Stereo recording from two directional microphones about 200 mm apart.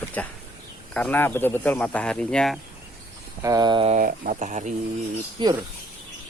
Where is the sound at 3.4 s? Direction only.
20° right (ahead or behind).